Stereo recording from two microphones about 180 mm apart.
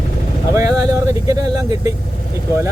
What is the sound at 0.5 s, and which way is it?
Speech, 15° right (ahead or behind).